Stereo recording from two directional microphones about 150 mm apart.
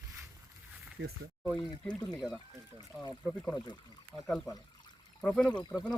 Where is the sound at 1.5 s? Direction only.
10° left (ahead or behind).